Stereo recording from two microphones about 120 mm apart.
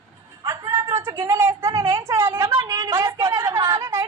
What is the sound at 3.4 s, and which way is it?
Speech, 40° right (ahead or behind).